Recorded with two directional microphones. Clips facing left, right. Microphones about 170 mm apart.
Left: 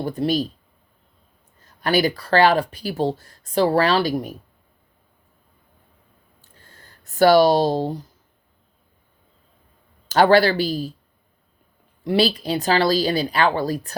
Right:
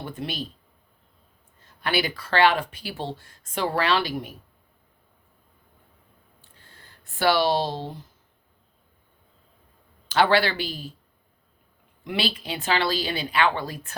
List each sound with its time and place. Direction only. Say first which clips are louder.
0.0 s speech: left 11 dB; 40° left (ahead or behind)
1.6 s speech: left 7 dB; 40° left (ahead or behind)
6.4 s a sound: left 4 dB; 45° left (ahead or behind)
10.1 s speech: left 6 dB; 40° left (ahead or behind)
12.0 s speech: left 9 dB; 40° left (ahead or behind)